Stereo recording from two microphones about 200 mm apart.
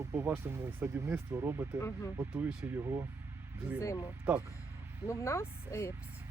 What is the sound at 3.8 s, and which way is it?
Speech, 15° left (ahead or behind).